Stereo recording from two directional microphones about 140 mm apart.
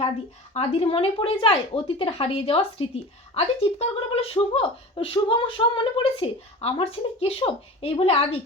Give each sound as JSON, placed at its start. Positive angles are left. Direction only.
{"t": 0.5, "sound": "a woman's voice", "side_deg": 45}